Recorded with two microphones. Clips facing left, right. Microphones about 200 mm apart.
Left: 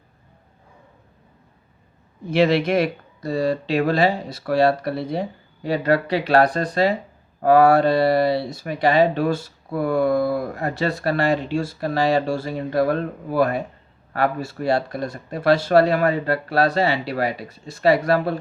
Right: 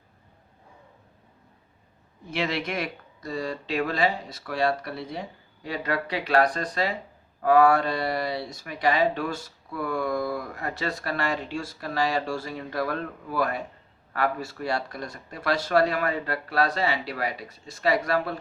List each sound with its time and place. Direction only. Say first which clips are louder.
2.3 s speech: left 11 dB; 30° left (ahead or behind)